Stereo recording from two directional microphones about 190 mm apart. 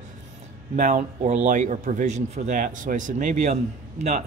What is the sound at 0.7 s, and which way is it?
Speech, 40° right (ahead or behind).